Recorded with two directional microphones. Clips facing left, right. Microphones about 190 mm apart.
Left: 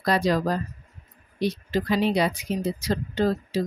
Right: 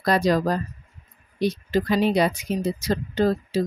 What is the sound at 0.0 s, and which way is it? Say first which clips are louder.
Speech: right 2 dB; 45° right (ahead or behind).